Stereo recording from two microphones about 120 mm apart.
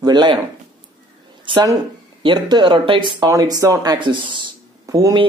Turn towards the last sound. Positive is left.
turn(degrees=-30)  # may be behind; listen again after turning